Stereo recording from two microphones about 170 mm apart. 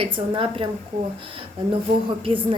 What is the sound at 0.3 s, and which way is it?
Speech, 30° right (ahead or behind).